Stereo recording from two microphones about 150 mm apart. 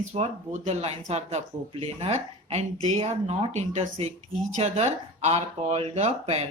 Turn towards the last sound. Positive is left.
turn(degrees=-45)  # may be behind; listen again after turning